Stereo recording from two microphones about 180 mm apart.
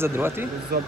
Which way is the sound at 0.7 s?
60° right (ahead or behind).